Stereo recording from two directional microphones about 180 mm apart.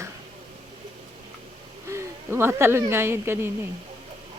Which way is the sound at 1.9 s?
15° right (ahead or behind).